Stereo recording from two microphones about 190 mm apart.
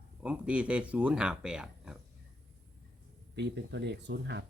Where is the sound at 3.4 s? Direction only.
65° right (ahead or behind).